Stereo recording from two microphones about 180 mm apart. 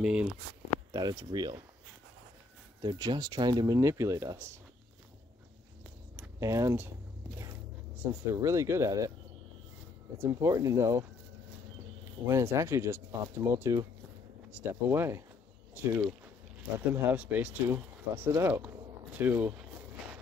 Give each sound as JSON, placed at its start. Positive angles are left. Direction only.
{"t": 0.0, "sound": "speech", "side_deg": -5}
{"t": 0.9, "sound": "speech", "side_deg": -20}
{"t": 2.8, "sound": "speech", "side_deg": -25}
{"t": 6.1, "sound": "speech", "side_deg": -15}
{"t": 8.0, "sound": "speech", "side_deg": -15}
{"t": 10.1, "sound": "speech", "side_deg": -15}
{"t": 12.3, "sound": "speech", "side_deg": -15}
{"t": 18.7, "sound": "walk", "side_deg": -10}